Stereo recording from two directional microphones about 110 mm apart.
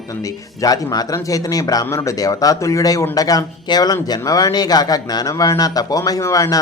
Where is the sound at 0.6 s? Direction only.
35° left (ahead or behind).